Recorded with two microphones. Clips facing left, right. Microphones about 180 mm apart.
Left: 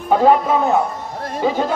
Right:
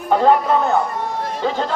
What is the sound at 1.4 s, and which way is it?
Speech, 10° left (ahead or behind).